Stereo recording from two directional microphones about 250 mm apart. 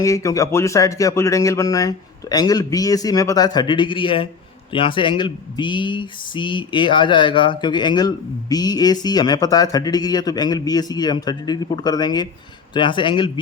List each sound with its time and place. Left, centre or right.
0.0 s speech: centre